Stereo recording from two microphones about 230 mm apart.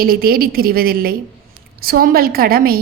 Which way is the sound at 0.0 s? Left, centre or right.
Right.